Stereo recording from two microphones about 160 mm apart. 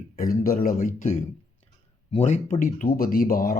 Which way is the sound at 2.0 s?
45° left (ahead or behind).